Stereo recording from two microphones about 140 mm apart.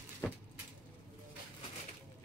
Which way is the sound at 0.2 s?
15° left (ahead or behind).